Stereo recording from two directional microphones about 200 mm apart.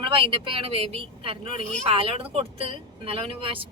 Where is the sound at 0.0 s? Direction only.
25° right (ahead or behind).